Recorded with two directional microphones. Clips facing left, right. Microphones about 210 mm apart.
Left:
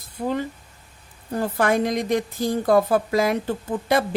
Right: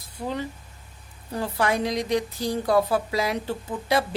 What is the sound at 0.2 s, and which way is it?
A woman's voice, 40° left (ahead or behind).